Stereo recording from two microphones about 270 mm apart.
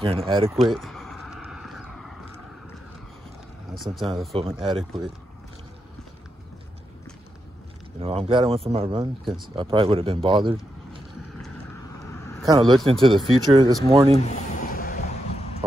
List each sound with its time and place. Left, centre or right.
0.0 s a man's voice: centre
0.5 s vehicle: centre
3.7 s speech: centre
4.3 s a man's voice: right
8.0 s a man's voice: right
12.4 s a man's voice: centre
14.1 s a sound: left